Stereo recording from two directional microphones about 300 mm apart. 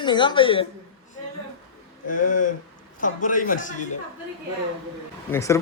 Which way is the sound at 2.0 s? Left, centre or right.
Left.